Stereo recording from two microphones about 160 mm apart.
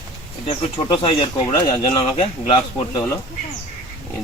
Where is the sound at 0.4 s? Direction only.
30° left (ahead or behind).